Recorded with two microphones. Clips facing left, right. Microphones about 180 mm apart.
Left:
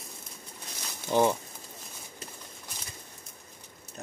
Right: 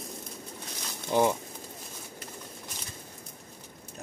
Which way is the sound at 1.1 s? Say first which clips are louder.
Even; 5° right (ahead or behind).